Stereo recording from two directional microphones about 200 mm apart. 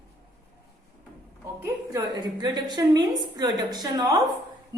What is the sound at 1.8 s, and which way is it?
A woman's voice, 20° right (ahead or behind).